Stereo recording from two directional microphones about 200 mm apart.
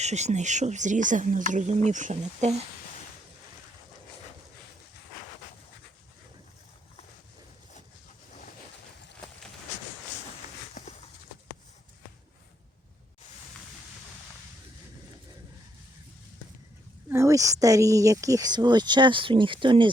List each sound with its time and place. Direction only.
0.0 s speech: 35° right (ahead or behind)
10.8 s a sound: 40° left (ahead or behind)
17.1 s speech: 15° right (ahead or behind)